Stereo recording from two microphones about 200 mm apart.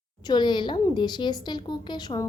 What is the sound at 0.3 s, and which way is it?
A woman's voice, 20° left (ahead or behind).